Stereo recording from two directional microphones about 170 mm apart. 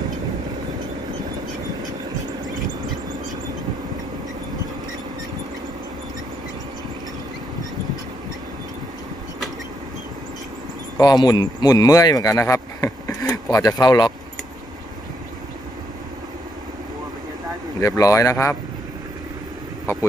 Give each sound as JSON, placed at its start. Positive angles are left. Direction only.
{"t": 11.0, "sound": "speech", "side_deg": 25}
{"t": 17.7, "sound": "speech", "side_deg": 20}